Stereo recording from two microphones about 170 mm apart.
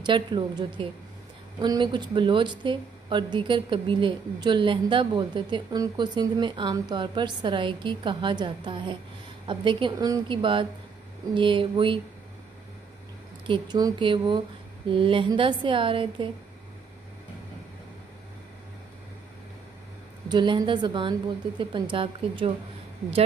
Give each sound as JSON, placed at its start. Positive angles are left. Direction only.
{"t": 0.0, "sound": "a woman's voice", "side_deg": -25}
{"t": 13.5, "sound": "a woman's voice", "side_deg": -25}
{"t": 20.2, "sound": "a woman's voice", "side_deg": -25}